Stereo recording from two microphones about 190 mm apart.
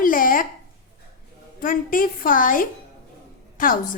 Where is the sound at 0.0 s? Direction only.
45° left (ahead or behind).